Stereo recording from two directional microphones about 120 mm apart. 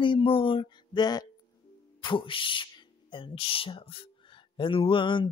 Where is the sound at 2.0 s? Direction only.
45° left (ahead or behind).